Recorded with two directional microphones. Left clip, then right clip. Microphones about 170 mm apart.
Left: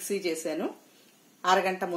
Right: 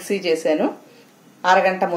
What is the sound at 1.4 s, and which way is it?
Speech, 55° left (ahead or behind).